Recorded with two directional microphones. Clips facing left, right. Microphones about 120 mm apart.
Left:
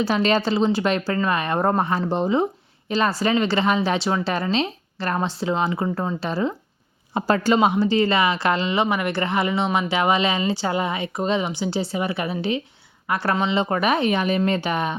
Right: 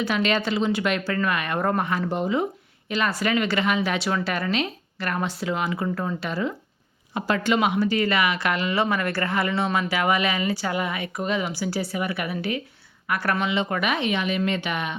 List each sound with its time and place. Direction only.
0.0 s speech: 35° left (ahead or behind)